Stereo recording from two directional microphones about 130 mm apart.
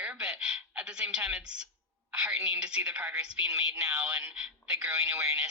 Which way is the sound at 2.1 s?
5° right (ahead or behind).